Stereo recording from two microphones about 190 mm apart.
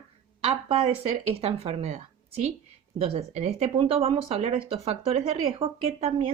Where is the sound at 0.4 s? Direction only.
30° right (ahead or behind).